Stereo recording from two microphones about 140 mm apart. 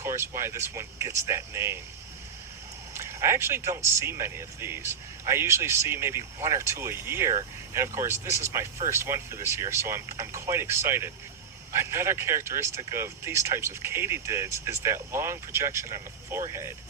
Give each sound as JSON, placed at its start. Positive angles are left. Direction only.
{"t": 0.0, "sound": "speech", "side_deg": -20}
{"t": 2.9, "sound": "speech", "side_deg": -20}